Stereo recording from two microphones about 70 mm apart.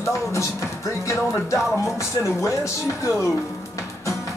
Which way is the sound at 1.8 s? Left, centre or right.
Left.